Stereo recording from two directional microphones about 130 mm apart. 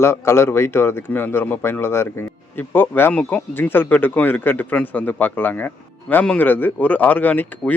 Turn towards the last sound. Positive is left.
turn(degrees=10)  # may be behind; listen again after turning